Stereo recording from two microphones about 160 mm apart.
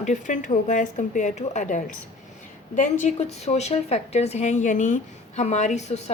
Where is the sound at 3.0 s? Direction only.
45° left (ahead or behind).